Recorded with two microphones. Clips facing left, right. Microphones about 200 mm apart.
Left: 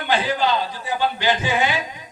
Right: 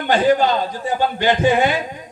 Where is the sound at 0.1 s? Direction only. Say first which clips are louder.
Right 6 dB; 45° right (ahead or behind).